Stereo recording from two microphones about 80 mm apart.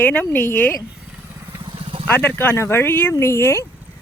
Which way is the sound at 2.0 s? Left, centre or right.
Left.